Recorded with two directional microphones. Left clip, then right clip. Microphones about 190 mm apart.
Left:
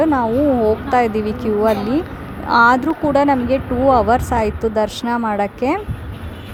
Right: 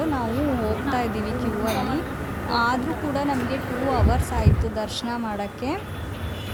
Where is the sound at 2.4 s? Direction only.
45° left (ahead or behind).